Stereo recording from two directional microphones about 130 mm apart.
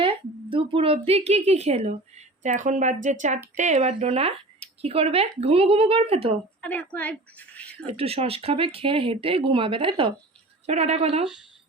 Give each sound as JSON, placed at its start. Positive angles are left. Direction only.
{"t": 0.0, "sound": "speech", "side_deg": -40}
{"t": 6.6, "sound": "speech", "side_deg": 15}
{"t": 7.9, "sound": "speech", "side_deg": -50}
{"t": 10.7, "sound": "speech", "side_deg": -60}